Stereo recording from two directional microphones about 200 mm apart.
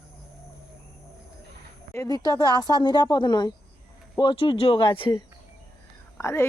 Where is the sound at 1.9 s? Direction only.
15° left (ahead or behind).